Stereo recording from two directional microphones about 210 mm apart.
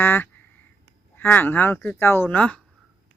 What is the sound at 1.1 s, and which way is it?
Speech, 10° left (ahead or behind).